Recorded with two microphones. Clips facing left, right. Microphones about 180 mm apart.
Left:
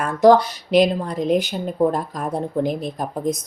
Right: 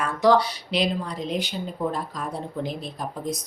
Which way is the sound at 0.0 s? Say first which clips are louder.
Left 6 dB; 45° left (ahead or behind).